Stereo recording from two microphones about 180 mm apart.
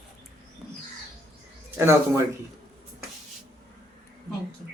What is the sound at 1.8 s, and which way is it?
Speech, 15° right (ahead or behind).